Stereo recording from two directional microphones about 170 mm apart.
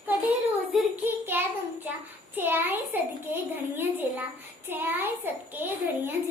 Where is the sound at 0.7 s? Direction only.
Centre (ahead or behind).